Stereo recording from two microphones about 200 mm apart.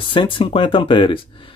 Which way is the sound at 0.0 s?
25° left (ahead or behind).